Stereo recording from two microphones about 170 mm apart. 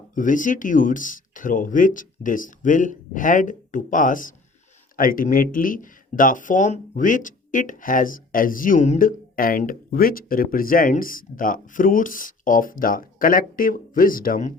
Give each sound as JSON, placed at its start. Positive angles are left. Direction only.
{"t": 0.1, "sound": "speech", "side_deg": 50}